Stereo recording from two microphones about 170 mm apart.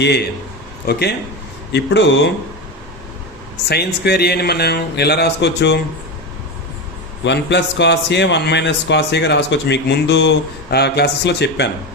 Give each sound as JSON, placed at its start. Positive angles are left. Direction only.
{"t": 0.9, "sound": "speech", "side_deg": 70}
{"t": 1.7, "sound": "a man's voice", "side_deg": 90}
{"t": 3.7, "sound": "speech", "side_deg": 70}
{"t": 7.3, "sound": "a man's voice", "side_deg": 90}